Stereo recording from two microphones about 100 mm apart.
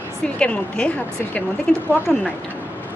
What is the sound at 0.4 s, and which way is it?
A woman's voice, 10° left (ahead or behind).